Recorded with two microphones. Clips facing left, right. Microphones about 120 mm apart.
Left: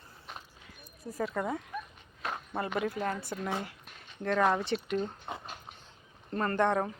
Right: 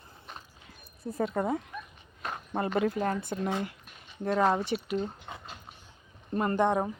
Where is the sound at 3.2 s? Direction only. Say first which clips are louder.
Right 3 dB; 20° right (ahead or behind).